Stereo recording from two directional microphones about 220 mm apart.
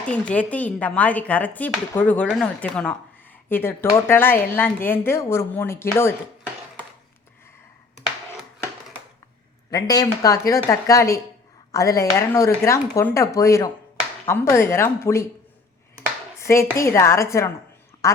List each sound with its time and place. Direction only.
0.0 s speech: 5° left (ahead or behind)
9.6 s speech: 15° left (ahead or behind)
16.4 s a woman's voice: 15° left (ahead or behind)